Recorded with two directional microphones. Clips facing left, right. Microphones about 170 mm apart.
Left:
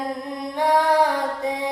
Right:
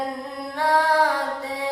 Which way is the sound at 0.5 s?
15° left (ahead or behind).